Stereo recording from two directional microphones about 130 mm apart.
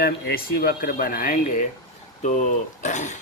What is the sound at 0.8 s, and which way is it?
Speech, 90° left.